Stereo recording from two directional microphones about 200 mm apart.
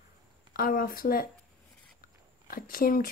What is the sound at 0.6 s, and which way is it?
Speech, 45° left (ahead or behind).